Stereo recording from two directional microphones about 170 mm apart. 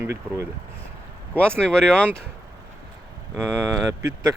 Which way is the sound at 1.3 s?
5° left (ahead or behind).